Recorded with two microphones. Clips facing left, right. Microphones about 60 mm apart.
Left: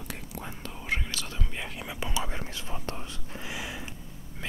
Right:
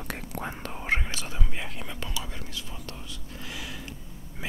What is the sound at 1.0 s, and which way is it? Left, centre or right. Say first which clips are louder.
Speech: right 1 dB; right.